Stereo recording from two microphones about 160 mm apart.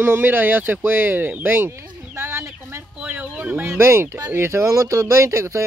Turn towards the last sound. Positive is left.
turn(degrees=-20)  # may be behind; listen again after turning